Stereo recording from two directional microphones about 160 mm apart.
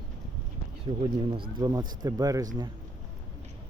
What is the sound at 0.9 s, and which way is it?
Speech, 30° right (ahead or behind).